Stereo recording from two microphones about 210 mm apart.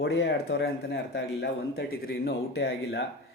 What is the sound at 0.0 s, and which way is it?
A man's voice, 55° left (ahead or behind).